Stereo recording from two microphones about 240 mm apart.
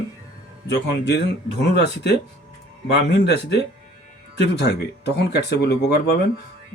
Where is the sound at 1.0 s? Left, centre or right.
Left.